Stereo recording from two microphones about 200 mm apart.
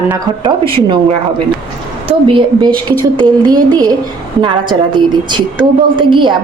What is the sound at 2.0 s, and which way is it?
Speech, 25° right (ahead or behind).